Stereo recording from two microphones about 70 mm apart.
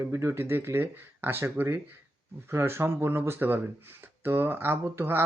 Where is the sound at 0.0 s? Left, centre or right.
Right.